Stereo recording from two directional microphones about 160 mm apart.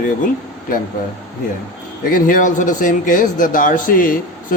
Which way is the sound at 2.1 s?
55° left (ahead or behind).